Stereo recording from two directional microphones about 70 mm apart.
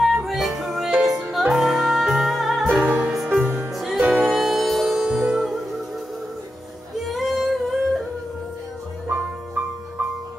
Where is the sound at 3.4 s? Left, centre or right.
Right.